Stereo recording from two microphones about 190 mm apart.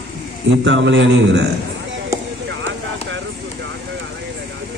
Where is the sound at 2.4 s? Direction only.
75° right (ahead or behind).